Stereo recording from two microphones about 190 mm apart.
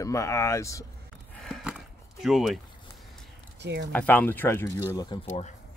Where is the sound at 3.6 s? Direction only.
65° right (ahead or behind).